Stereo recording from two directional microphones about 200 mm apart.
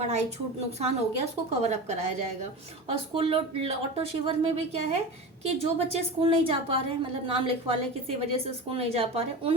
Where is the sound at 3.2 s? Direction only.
30° right (ahead or behind).